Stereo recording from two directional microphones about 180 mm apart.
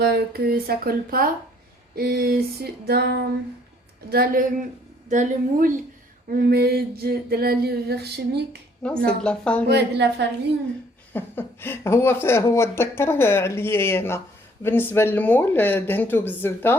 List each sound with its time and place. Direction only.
0.0 s a sound: 60° right (ahead or behind)
5.0 s a woman's voice: 45° right (ahead or behind)
6.3 s a sound: 60° right (ahead or behind)
9.0 s a woman's voice: 5° left (ahead or behind)
9.6 s a woman's voice: 65° right (ahead or behind)
11.1 s speech: 10° left (ahead or behind)